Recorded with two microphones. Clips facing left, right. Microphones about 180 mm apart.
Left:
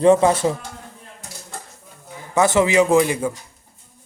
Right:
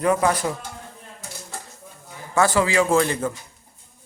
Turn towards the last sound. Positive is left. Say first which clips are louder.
# left 3 dB
turn(degrees=10)  # may be behind; listen again after turning